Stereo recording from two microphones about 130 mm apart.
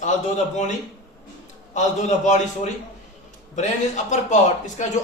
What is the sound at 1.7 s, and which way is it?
Speech, 65° left (ahead or behind).